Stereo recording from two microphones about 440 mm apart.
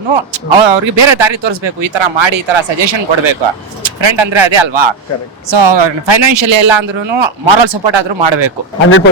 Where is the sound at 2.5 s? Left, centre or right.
Right.